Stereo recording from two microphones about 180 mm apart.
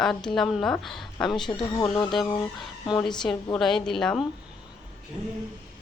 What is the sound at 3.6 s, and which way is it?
Speech, centre (ahead or behind).